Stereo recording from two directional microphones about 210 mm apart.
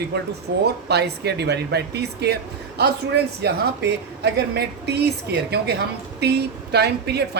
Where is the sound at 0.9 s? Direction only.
50° right (ahead or behind).